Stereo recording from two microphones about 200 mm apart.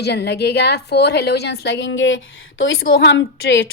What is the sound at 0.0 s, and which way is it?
A woman's voice, 55° left (ahead or behind).